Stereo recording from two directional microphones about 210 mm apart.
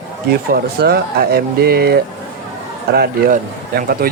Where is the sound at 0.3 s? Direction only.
50° right (ahead or behind).